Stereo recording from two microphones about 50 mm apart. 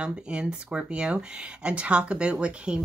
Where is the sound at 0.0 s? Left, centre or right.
Centre.